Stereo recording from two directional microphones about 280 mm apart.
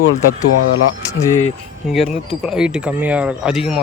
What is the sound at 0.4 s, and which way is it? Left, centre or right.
Speech, left.